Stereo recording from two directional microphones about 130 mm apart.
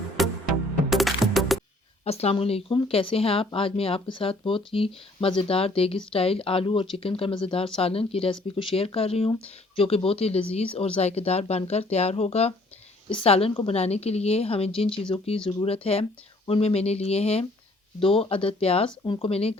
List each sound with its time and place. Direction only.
0.2 s music: centre (ahead or behind)
2.0 s speech: 50° left (ahead or behind)